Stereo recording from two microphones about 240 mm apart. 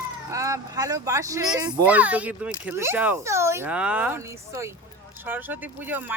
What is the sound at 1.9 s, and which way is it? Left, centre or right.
Speech, centre.